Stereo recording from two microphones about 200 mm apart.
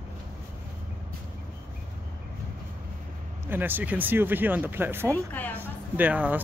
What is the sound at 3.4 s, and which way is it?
Speech, 10° right (ahead or behind).